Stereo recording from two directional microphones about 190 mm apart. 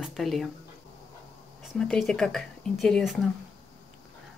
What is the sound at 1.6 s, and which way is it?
Speech, centre (ahead or behind).